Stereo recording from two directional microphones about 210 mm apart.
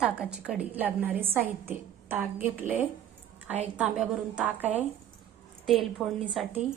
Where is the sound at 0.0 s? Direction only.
5° right (ahead or behind).